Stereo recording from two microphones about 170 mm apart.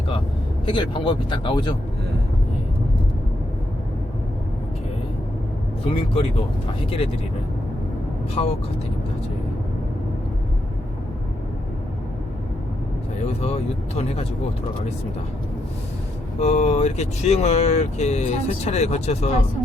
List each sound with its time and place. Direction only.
0.6 s speech: 30° left (ahead or behind)
5.8 s speech: 35° left (ahead or behind)
8.4 s speech: 35° left (ahead or behind)
13.4 s speech: 40° left (ahead or behind)
16.4 s speech: 40° left (ahead or behind)